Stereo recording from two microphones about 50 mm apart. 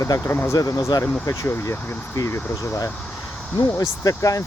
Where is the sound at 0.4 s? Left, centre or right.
Left.